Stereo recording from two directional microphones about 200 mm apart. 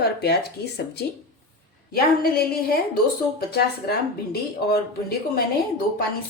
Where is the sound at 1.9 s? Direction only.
50° left (ahead or behind).